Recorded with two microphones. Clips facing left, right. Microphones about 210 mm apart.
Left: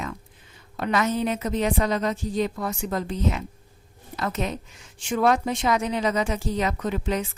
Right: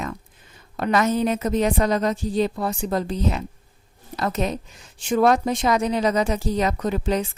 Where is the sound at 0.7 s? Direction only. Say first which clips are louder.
Right 3 dB; 40° right (ahead or behind).